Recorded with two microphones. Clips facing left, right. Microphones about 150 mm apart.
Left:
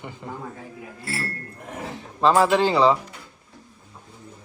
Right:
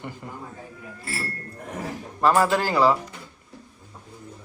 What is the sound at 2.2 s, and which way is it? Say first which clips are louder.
Speech: left 2 dB; 20° left (ahead or behind).